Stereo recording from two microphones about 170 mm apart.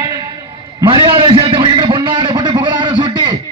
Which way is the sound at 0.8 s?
30° right (ahead or behind).